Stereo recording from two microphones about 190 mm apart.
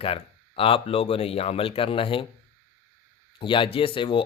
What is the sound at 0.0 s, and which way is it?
Speech, 30° left (ahead or behind).